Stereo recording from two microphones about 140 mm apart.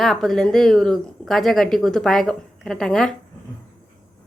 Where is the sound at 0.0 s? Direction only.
Centre (ahead or behind).